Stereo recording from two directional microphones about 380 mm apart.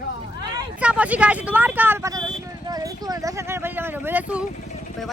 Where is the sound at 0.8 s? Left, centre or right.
Centre.